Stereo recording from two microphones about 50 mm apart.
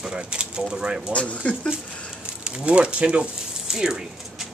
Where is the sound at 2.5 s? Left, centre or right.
Right.